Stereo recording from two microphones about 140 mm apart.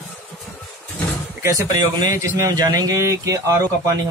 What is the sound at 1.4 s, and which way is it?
Speech, 20° right (ahead or behind).